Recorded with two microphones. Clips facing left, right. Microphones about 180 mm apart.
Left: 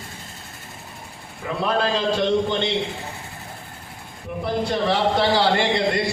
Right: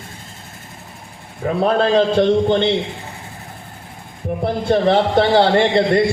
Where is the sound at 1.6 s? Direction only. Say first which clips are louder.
Right 7 dB; 55° right (ahead or behind).